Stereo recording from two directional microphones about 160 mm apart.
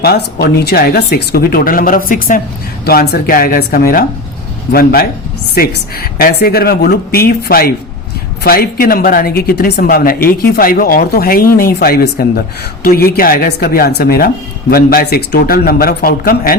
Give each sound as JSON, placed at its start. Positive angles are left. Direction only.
{"t": 0.0, "sound": "speech", "side_deg": 85}
{"t": 2.8, "sound": "speech", "side_deg": 80}